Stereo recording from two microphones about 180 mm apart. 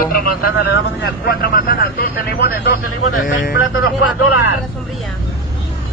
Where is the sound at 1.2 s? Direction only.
55° left (ahead or behind).